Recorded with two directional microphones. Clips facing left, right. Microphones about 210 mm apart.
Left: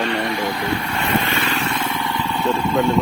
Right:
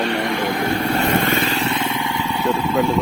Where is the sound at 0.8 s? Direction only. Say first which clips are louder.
Right 4 dB; 40° right (ahead or behind).